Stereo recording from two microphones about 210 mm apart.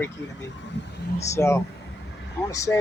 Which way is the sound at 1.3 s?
15° left (ahead or behind).